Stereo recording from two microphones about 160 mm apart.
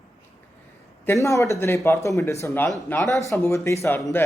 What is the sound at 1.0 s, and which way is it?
A man's voice, 15° left (ahead or behind).